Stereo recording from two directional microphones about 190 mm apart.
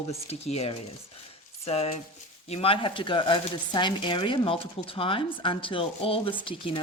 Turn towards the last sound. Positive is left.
turn(degrees=25)  # may be behind; listen again after turning